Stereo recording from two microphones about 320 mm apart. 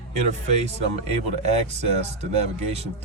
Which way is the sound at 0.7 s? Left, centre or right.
Centre.